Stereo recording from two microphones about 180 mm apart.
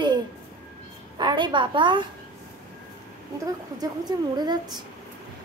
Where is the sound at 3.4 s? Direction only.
20° right (ahead or behind).